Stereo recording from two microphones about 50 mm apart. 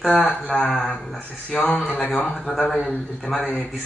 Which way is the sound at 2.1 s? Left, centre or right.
Centre.